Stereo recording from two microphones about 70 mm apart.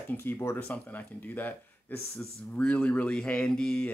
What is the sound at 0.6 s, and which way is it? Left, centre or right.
Speech, left.